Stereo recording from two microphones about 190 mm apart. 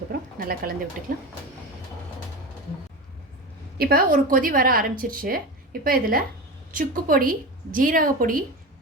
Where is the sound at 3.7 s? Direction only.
50° right (ahead or behind).